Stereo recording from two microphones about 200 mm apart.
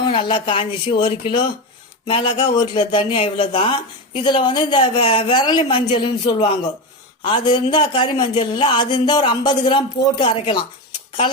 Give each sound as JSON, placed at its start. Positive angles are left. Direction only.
{"t": 0.0, "sound": "a man's voice", "side_deg": 25}
{"t": 7.3, "sound": "a man's voice", "side_deg": 25}